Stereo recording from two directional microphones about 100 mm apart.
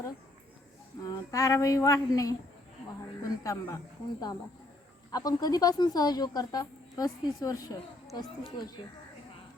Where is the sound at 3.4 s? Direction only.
35° left (ahead or behind).